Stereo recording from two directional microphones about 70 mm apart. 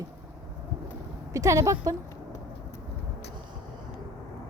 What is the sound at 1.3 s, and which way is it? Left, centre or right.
Speech, right.